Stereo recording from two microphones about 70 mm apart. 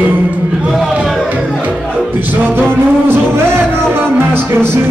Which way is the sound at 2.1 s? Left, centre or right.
Right.